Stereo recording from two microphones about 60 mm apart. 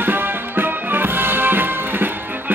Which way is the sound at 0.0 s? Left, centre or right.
Right.